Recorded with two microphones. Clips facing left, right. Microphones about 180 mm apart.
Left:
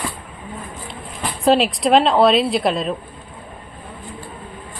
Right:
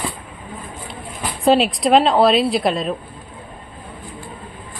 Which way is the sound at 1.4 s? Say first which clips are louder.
Right 1 dB; centre (ahead or behind).